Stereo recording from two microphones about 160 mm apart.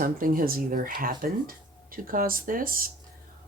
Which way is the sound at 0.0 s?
65° right (ahead or behind).